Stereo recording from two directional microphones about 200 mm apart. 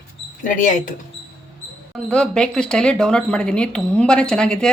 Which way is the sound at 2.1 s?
5° left (ahead or behind).